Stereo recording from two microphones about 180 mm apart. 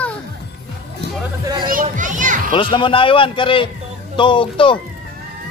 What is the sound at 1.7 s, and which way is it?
Speech, 45° right (ahead or behind).